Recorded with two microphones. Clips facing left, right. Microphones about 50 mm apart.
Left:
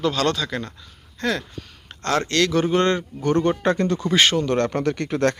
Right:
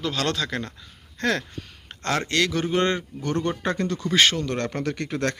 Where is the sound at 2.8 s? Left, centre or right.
Centre.